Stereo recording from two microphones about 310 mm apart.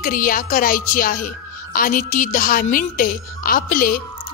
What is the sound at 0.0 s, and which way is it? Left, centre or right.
Speech, left.